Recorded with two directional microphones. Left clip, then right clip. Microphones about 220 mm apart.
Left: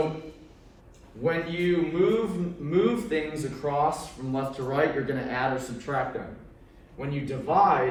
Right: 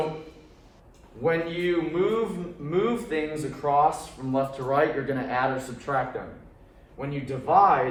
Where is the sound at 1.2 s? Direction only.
25° right (ahead or behind).